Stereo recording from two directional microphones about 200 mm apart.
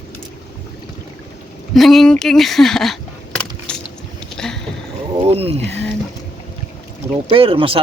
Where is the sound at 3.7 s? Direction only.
5° left (ahead or behind).